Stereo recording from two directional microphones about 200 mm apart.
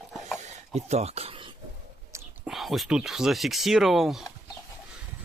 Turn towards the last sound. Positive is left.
turn(degrees=0)  # may be behind; listen again after turning